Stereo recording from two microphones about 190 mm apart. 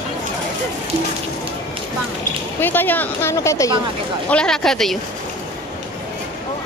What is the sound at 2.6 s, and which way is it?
Speech, 10° left (ahead or behind).